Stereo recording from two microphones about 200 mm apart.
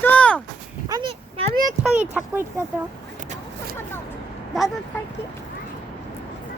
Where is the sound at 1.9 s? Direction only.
10° right (ahead or behind).